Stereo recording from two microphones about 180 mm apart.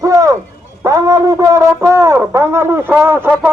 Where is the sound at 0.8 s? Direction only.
15° right (ahead or behind).